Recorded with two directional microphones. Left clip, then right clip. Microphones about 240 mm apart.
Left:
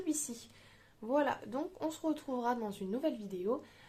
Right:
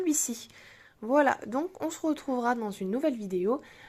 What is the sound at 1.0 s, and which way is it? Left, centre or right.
A woman's voice, right.